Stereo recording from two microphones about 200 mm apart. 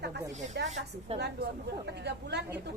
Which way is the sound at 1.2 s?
55° right (ahead or behind).